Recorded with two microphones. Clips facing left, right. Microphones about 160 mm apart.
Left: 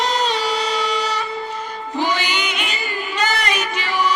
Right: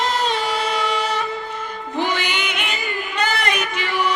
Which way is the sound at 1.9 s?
55° right (ahead or behind).